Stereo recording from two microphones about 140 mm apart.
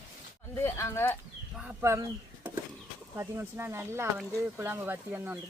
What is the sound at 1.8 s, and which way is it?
Speech, 20° right (ahead or behind).